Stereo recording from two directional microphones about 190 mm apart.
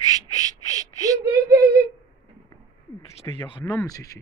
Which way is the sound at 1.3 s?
55° right (ahead or behind).